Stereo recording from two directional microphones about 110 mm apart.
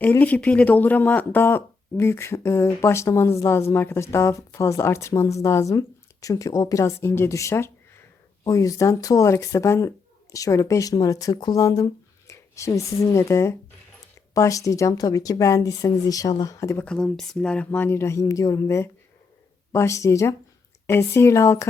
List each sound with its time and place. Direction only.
0.0 s speech: 15° left (ahead or behind)
16.8 s speech: 5° left (ahead or behind); by 21.7 s 25° left (ahead or behind)